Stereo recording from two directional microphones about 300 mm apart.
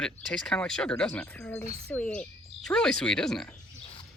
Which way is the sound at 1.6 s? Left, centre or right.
Centre.